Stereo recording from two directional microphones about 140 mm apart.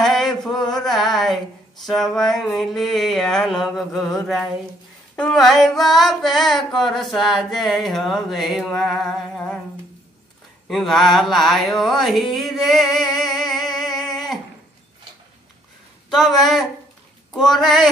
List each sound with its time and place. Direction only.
0.0 s a sound: centre (ahead or behind)
5.1 s female singing: 5° left (ahead or behind)
10.7 s mantra: centre (ahead or behind)
16.1 s female singing: centre (ahead or behind)